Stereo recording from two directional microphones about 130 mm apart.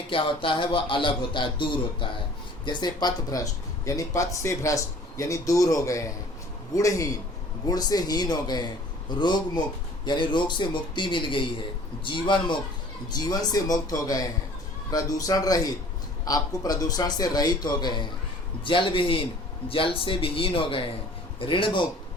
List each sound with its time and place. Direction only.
0.1 s a man's voice: 40° left (ahead or behind)